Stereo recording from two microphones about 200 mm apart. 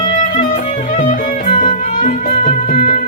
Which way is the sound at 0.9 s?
40° left (ahead or behind).